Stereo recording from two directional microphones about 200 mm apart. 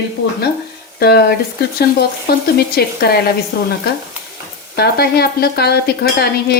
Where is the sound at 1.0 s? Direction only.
55° left (ahead or behind).